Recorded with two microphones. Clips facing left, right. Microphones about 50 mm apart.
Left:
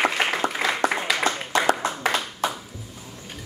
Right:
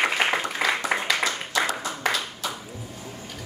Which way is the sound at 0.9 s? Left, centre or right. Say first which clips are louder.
Even; centre.